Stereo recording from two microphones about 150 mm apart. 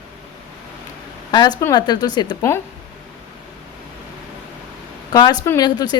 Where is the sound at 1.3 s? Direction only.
30° left (ahead or behind).